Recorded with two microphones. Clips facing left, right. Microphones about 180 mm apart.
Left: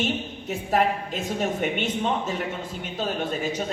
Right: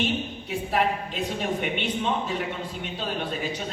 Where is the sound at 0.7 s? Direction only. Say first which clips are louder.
Left 3 dB; 45° left (ahead or behind).